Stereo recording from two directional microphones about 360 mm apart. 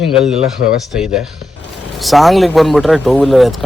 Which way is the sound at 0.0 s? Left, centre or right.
Centre.